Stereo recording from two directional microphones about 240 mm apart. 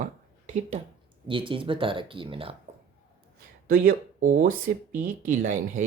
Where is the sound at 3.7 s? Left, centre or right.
Right.